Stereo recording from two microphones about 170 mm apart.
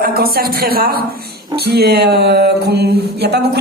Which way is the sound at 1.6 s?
70° right (ahead or behind).